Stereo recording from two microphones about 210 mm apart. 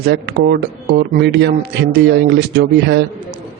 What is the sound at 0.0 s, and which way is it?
Speech, 50° right (ahead or behind).